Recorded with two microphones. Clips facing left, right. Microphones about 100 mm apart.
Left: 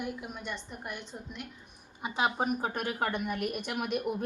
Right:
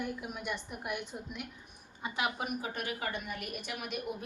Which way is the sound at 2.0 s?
25° left (ahead or behind).